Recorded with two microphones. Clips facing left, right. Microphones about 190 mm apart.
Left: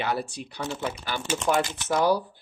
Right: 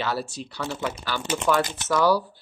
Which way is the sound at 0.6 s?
20° left (ahead or behind).